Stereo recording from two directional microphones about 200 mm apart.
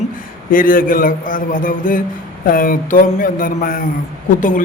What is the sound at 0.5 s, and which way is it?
A man's voice, 45° left (ahead or behind).